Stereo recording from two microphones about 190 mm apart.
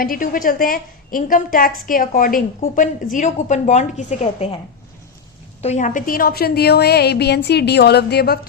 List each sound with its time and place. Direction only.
0.0 s a woman's voice: 50° left (ahead or behind)
5.6 s a woman's voice: 40° left (ahead or behind); by 8.4 s 55° left (ahead or behind)